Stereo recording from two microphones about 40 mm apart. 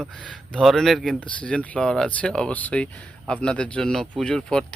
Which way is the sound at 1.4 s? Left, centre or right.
Left.